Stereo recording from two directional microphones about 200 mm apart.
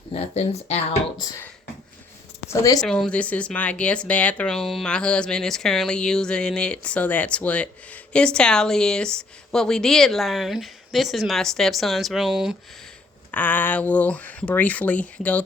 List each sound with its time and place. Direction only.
0.1 s speech: 30° left (ahead or behind)
2.5 s speech: 15° left (ahead or behind)
2.8 s speech: 5° left (ahead or behind)
13.3 s speech: 10° left (ahead or behind)